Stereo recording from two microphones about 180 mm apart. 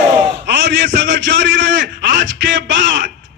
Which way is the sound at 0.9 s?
80° right.